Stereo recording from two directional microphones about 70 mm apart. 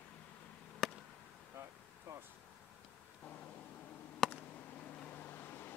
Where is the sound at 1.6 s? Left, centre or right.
Right.